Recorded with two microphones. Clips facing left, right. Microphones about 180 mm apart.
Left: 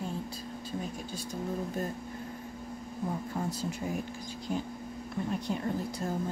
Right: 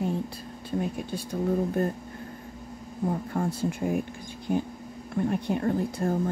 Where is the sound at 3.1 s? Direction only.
55° right (ahead or behind).